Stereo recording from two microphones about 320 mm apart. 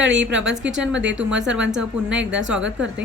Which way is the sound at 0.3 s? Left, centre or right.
Centre.